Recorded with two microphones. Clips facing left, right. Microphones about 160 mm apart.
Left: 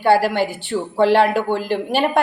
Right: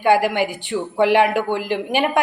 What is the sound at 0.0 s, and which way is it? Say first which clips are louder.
A woman's voice: left 1 dB; 15° right (ahead or behind).